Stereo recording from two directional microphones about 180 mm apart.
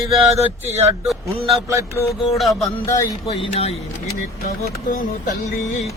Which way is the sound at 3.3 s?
35° left (ahead or behind).